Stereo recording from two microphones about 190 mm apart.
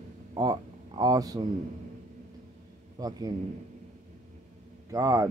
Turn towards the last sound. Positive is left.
turn(degrees=-15)  # may be behind; listen again after turning